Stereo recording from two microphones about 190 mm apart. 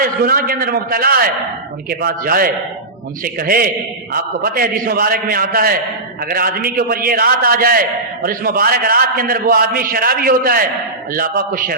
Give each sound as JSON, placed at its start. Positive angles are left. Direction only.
{"t": 0.0, "sound": "a man's voice", "side_deg": -50}